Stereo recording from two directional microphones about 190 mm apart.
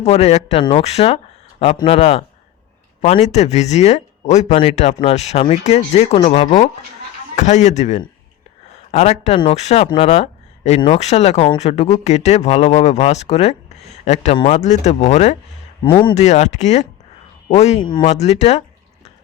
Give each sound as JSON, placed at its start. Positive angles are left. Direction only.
{"t": 0.0, "sound": "speech", "side_deg": 35}
{"t": 15.8, "sound": "speech", "side_deg": 25}
{"t": 16.1, "sound": "speech", "side_deg": 35}